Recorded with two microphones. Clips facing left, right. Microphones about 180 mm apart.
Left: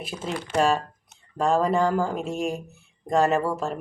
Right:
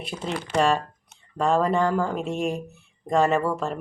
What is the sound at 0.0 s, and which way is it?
Speech, 5° left (ahead or behind).